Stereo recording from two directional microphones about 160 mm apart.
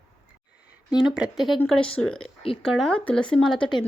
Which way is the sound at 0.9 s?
5° right (ahead or behind).